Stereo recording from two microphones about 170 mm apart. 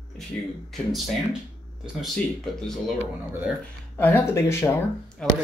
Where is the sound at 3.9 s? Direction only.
10° left (ahead or behind).